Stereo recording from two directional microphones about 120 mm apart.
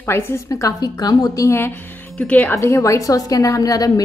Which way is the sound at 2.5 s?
25° left (ahead or behind).